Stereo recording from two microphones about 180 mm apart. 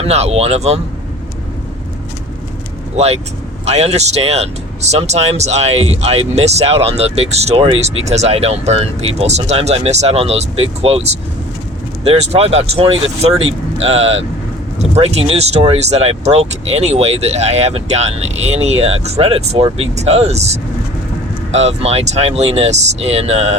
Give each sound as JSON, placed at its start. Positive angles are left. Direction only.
{"t": 0.0, "sound": "speech", "side_deg": -35}
{"t": 2.9, "sound": "speech", "side_deg": -35}